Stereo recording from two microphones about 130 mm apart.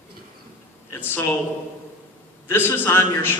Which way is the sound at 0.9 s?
15° left (ahead or behind).